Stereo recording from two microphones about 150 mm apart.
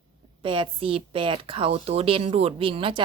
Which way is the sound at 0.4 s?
35° right (ahead or behind).